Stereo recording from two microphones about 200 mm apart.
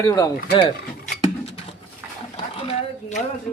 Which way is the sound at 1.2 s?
30° left (ahead or behind).